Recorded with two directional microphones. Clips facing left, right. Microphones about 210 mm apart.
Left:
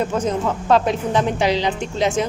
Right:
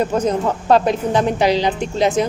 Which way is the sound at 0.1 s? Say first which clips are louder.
Right 3 dB; 40° right (ahead or behind).